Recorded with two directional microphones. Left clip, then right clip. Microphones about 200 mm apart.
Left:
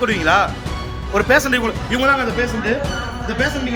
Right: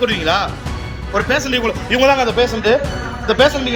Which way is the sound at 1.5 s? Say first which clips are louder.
Right 3 dB; 10° left (ahead or behind).